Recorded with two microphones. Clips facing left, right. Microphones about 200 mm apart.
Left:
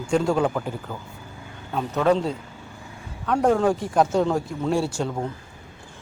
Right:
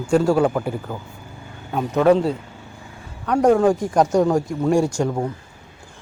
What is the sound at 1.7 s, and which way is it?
A man's voice, 10° right (ahead or behind).